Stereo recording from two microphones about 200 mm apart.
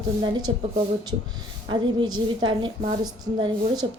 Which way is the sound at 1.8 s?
25° right (ahead or behind).